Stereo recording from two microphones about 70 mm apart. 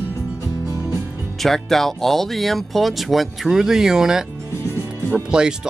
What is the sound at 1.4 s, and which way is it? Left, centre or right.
Speech, centre.